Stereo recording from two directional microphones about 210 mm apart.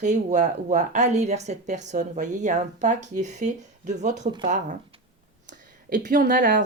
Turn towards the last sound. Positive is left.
turn(degrees=-40)  # may be behind; listen again after turning